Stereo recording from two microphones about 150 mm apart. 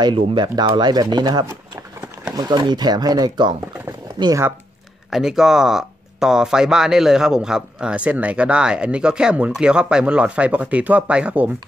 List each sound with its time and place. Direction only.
0.0 s speech: 30° right (ahead or behind)
5.1 s speech: 5° right (ahead or behind)